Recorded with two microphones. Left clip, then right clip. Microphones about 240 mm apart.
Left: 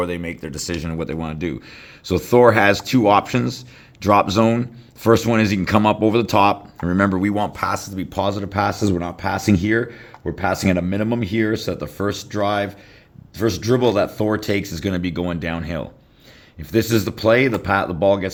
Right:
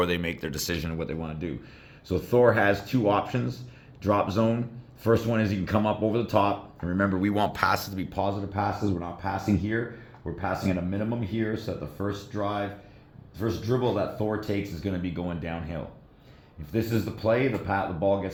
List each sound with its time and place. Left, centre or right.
0.0 s speech: left